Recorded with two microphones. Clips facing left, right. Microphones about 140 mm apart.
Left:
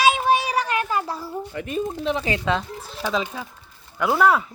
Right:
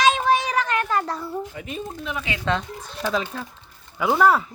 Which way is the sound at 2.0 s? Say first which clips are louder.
Left 6 dB; 35° left (ahead or behind).